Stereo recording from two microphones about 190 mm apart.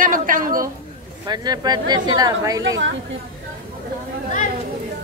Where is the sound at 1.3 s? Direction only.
20° right (ahead or behind).